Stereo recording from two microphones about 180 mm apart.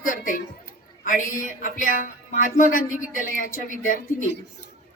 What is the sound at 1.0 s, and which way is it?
A woman's voice, 50° left (ahead or behind).